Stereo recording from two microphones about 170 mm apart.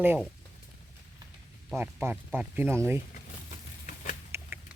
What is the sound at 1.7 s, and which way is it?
Speech, 10° right (ahead or behind).